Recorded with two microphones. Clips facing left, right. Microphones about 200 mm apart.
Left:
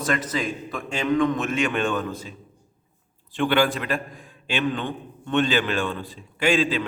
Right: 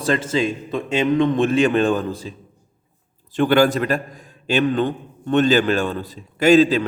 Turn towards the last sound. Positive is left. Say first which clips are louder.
# right 8 dB
turn(degrees=-40)  # may be behind; listen again after turning